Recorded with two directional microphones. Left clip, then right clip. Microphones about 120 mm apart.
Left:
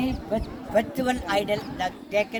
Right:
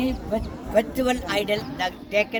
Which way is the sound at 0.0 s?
10° left (ahead or behind).